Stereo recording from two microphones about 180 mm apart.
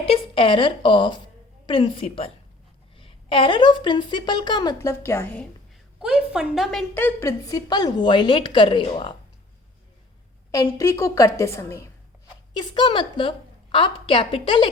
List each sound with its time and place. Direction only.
0.0 s a woman's voice: 30° left (ahead or behind); by 5.5 s 10° left (ahead or behind)
6.0 s a woman's voice: 5° right (ahead or behind); by 9.1 s 30° left (ahead or behind)
10.5 s a woman's voice: 20° left (ahead or behind)
12.5 s a woman's voice: 25° left (ahead or behind)